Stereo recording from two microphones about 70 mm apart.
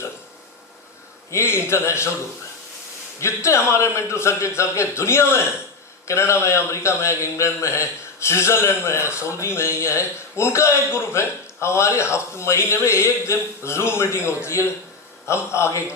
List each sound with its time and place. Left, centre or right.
1.3 s a man's voice: left
3.2 s a man's voice: left